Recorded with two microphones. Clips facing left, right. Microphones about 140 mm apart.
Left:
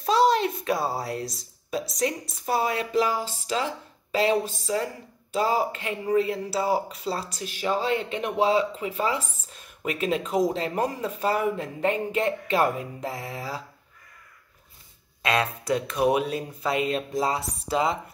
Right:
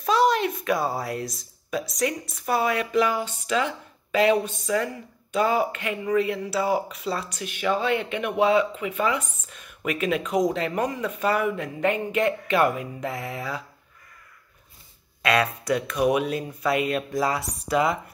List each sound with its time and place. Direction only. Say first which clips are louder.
0.0 s a woman's voice: even; 30° left (ahead or behind)
15.2 s speech: right 2 dB; 30° left (ahead or behind)